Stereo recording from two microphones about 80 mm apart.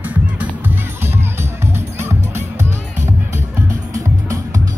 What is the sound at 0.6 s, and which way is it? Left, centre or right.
Music, right.